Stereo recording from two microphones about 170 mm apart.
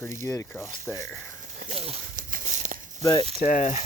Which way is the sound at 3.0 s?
25° left (ahead or behind).